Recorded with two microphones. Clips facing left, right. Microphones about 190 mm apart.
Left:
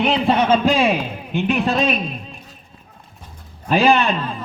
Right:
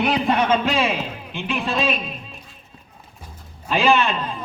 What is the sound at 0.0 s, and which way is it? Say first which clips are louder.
Speech: left 3 dB; 25° left (ahead or behind).